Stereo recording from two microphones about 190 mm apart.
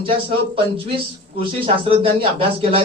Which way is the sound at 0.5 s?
30° right (ahead or behind).